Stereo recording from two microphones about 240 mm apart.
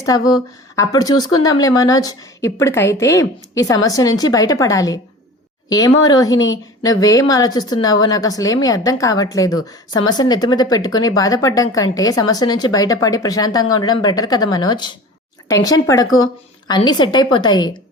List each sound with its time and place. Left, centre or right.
0.0 s speech: centre